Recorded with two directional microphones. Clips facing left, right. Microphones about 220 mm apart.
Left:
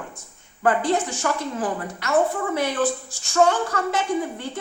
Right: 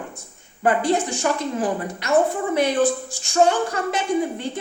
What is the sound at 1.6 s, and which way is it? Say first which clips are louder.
A woman's voice: right 3 dB; 15° right (ahead or behind).